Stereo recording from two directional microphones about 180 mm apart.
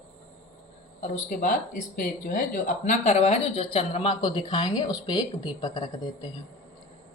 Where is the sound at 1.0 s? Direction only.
45° left (ahead or behind); by 6.3 s 25° left (ahead or behind).